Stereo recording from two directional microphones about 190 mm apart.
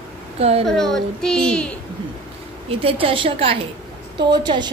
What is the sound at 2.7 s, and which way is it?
A woman's voice, 30° right (ahead or behind).